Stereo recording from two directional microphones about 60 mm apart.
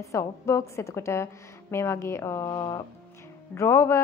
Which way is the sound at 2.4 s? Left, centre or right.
Left.